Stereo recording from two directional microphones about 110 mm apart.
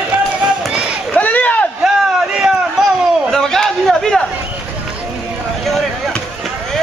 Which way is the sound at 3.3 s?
5° left (ahead or behind).